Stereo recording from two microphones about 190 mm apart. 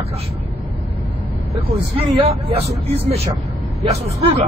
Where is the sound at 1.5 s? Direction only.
30° right (ahead or behind).